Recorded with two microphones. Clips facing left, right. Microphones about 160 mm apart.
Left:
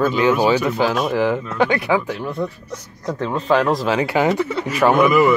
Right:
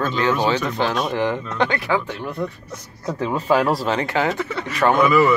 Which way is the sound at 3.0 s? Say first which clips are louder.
Left 1 dB; 10° right (ahead or behind).